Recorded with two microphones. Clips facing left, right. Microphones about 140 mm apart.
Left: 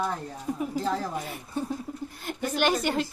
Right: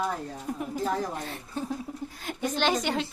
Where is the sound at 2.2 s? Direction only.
10° left (ahead or behind).